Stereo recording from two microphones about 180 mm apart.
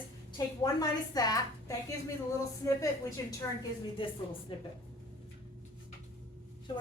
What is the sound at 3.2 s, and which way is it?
Speech, 20° left (ahead or behind).